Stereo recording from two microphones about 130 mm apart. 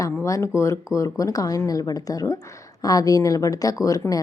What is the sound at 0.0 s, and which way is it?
A woman's voice, 25° left (ahead or behind).